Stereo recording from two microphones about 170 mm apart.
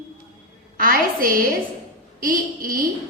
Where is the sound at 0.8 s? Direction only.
55° right (ahead or behind).